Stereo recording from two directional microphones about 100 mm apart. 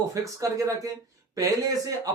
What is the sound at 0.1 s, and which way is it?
Speech, 35° right (ahead or behind).